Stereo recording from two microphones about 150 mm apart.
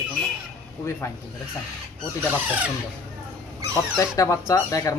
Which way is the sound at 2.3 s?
10° right (ahead or behind).